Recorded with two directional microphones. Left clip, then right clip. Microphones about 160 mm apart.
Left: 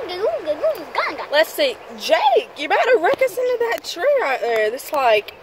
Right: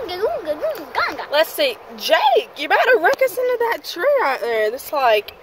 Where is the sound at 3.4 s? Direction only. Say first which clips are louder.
Right 1 dB; 40° right (ahead or behind); by 4.5 s 55° right (ahead or behind).